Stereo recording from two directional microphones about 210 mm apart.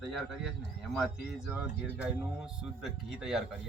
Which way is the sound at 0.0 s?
Centre (ahead or behind).